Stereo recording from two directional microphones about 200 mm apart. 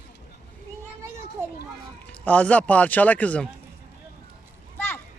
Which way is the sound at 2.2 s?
5° left (ahead or behind).